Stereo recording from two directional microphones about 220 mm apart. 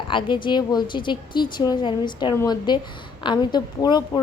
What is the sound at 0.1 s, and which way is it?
A woman's voice, 20° left (ahead or behind).